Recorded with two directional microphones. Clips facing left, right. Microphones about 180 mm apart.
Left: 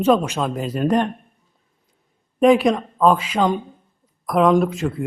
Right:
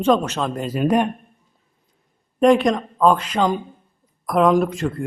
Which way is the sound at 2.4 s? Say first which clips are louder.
Left 1 dB; centre (ahead or behind).